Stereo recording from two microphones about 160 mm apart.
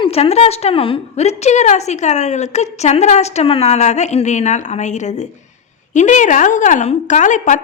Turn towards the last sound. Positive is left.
turn(degrees=50)  # may be behind; listen again after turning